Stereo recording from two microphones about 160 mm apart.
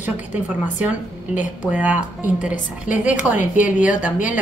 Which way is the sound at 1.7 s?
10° right (ahead or behind).